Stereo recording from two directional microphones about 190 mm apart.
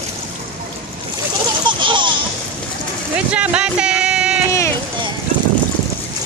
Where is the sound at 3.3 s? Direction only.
5° right (ahead or behind).